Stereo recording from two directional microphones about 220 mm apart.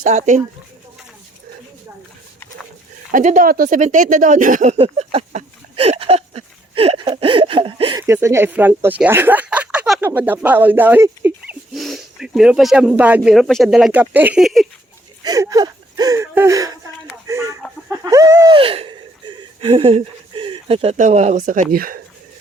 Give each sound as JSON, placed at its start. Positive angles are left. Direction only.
{"t": 0.0, "sound": "speech", "side_deg": -30}
{"t": 3.1, "sound": "speech", "side_deg": -35}
{"t": 15.2, "sound": "speech", "side_deg": -15}
{"t": 17.2, "sound": "chicken", "side_deg": -15}
{"t": 17.8, "sound": "a sound", "side_deg": -15}
{"t": 19.6, "sound": "speech", "side_deg": -25}